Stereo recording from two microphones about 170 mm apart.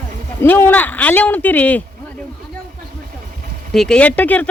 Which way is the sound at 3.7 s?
5° left (ahead or behind).